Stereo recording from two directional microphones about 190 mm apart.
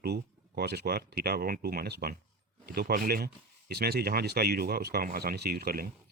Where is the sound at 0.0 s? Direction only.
55° right (ahead or behind).